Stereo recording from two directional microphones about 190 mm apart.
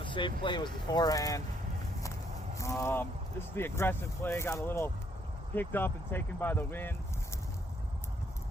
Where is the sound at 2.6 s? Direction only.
15° left (ahead or behind).